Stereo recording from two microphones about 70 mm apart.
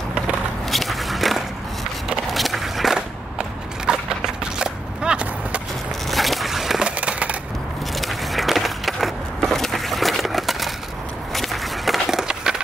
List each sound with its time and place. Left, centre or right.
0.7 s biting: centre
2.3 s a sound: centre
6.0 s a sound: centre
7.0 s crushing: centre
7.9 s skateboard: centre
11.3 s walk: centre